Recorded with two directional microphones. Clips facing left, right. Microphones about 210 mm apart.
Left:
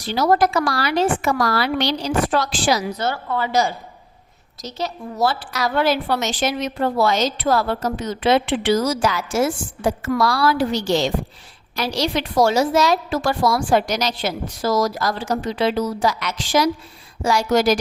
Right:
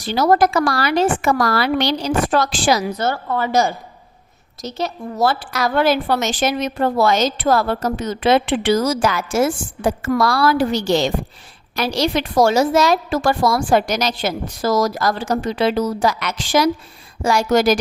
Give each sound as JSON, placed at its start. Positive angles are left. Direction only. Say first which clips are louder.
{"t": 0.1, "sound": "a woman's voice", "louder": "right 2 dB", "side_deg": -50}